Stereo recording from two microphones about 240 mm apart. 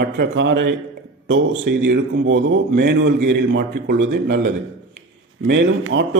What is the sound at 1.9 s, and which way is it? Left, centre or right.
A man's voice, right.